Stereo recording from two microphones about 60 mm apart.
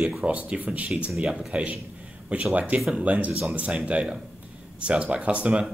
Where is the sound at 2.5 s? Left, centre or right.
Right.